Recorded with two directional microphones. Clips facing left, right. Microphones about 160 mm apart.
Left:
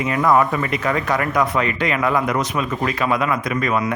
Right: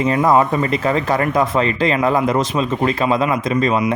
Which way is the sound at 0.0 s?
30° right (ahead or behind).